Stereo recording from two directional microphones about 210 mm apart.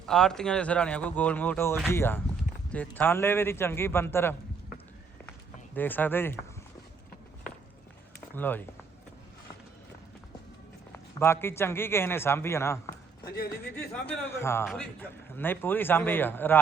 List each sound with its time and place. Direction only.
0.0 s a man's voice: 5° left (ahead or behind)
5.7 s a man's voice: 10° left (ahead or behind)
8.4 s a man's voice: 10° left (ahead or behind)
10.9 s a man's voice: 10° left (ahead or behind)
13.2 s a man's voice: 50° left (ahead or behind)
13.9 s a man's voice: 10° left (ahead or behind)